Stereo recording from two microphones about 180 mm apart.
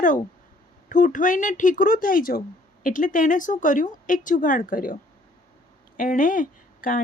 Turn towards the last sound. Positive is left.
turn(degrees=50)  # may be behind; listen again after turning